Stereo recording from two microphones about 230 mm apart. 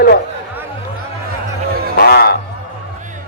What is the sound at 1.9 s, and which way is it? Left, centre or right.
Speech, left.